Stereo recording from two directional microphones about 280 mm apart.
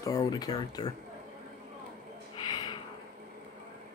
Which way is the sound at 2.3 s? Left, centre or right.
Centre.